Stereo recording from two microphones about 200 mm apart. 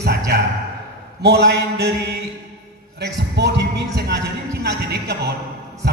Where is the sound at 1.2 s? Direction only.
55° right (ahead or behind).